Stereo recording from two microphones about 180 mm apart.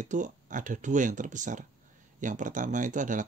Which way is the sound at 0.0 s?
45° right (ahead or behind).